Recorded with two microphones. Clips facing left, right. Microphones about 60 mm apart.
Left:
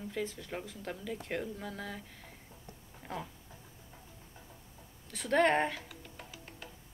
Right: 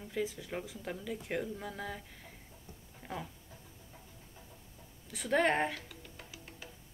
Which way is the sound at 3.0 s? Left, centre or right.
Centre.